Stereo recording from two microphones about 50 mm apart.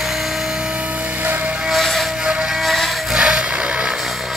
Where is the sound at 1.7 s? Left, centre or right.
Centre.